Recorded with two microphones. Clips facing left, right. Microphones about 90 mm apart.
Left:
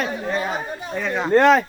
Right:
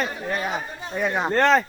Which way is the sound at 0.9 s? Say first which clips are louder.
Right 1 dB; 15° right (ahead or behind).